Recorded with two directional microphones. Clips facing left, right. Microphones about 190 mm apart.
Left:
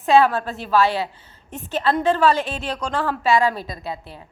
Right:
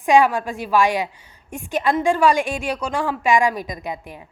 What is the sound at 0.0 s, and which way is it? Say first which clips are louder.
A woman's voice: even; 15° right (ahead or behind).